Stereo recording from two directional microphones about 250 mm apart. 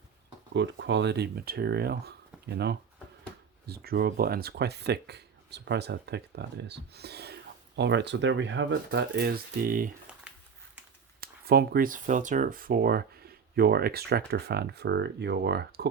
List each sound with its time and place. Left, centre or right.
0.5 s speech: right
11.2 s speech: right